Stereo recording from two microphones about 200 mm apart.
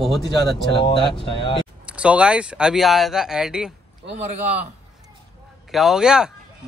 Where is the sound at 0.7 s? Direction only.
25° left (ahead or behind).